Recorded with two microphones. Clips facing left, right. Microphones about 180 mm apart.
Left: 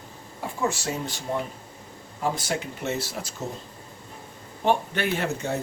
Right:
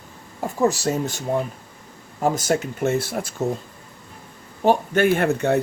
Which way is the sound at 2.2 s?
45° right (ahead or behind).